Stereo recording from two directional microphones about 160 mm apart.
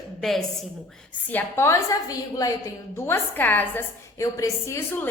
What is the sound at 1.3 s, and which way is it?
A woman's voice, 15° left (ahead or behind).